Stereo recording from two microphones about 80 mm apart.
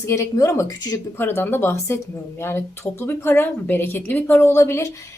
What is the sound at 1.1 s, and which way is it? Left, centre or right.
A woman's voice, left.